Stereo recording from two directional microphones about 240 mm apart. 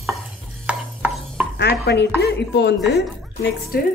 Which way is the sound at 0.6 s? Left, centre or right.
Centre.